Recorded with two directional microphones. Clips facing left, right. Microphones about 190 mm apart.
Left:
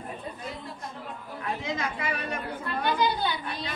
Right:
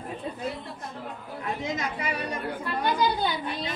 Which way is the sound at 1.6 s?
20° right (ahead or behind).